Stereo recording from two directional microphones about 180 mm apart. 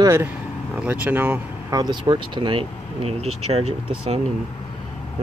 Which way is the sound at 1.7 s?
25° right (ahead or behind).